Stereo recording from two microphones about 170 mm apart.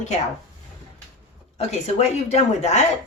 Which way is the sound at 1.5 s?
40° left (ahead or behind).